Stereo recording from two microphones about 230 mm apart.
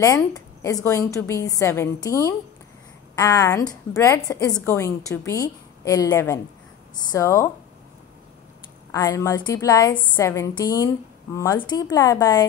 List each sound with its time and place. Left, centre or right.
0.0 s a woman's voice: centre
8.9 s a woman's voice: centre